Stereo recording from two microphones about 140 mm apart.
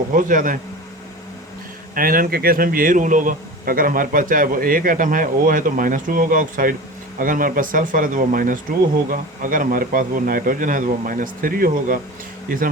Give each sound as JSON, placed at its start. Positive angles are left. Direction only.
{"t": 0.1, "sound": "speech", "side_deg": -70}
{"t": 2.0, "sound": "speech", "side_deg": -90}